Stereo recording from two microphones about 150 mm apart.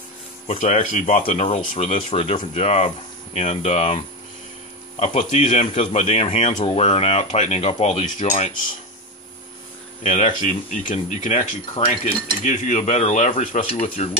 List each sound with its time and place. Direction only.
0.5 s speech: 50° left (ahead or behind)
10.0 s speech: 55° left (ahead or behind)